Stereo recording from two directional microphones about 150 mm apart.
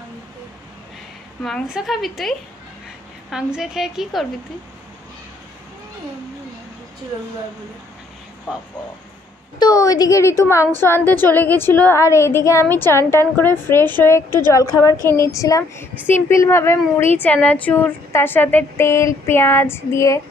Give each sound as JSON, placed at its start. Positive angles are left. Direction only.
{"t": 1.4, "sound": "a woman's voice", "side_deg": 0}
{"t": 3.5, "sound": "a woman's voice", "side_deg": -5}
{"t": 9.6, "sound": "a woman's voice", "side_deg": 25}